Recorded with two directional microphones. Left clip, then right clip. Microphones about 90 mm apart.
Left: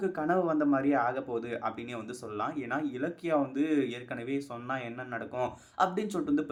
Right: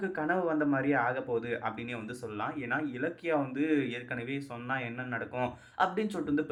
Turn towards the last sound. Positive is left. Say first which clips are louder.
# left 1 dB
turn(degrees=40)  # may be behind; listen again after turning